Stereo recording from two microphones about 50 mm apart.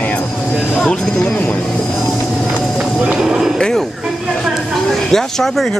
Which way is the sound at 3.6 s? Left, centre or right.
Centre.